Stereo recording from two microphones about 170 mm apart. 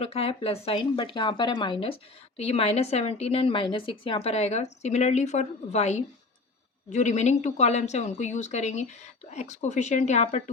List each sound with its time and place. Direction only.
0.0 s a woman's voice: 35° left (ahead or behind)